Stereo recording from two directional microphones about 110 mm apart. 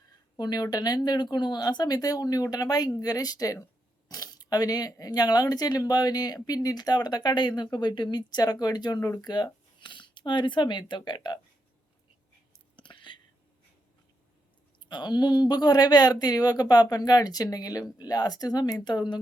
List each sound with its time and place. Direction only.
0.3 s speech: 40° left (ahead or behind)
12.7 s whispering: 45° left (ahead or behind)
14.8 s speech: 40° left (ahead or behind)